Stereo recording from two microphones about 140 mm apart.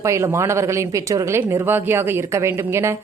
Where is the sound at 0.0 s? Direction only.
20° right (ahead or behind).